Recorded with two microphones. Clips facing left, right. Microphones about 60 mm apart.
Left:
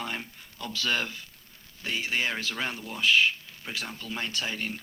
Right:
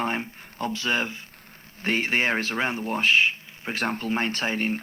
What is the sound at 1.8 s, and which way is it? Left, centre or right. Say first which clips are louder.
Speech: right 6 dB; right.